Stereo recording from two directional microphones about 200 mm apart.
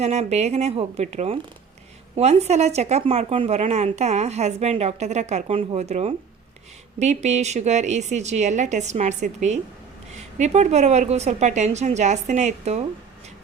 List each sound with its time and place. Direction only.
0.0 s speech: 35° right (ahead or behind)